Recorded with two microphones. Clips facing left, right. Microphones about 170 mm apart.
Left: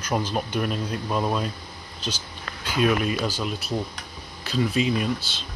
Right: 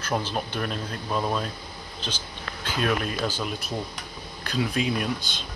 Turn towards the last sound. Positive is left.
turn(degrees=0)  # may be behind; listen again after turning